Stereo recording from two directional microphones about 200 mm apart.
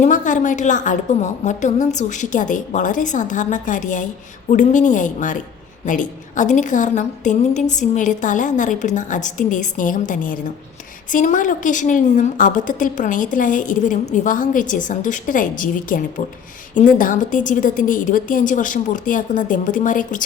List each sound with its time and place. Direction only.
0.0 s a woman's voice: 40° left (ahead or behind)